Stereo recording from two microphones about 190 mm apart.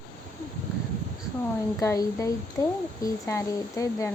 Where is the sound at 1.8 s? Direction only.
15° left (ahead or behind).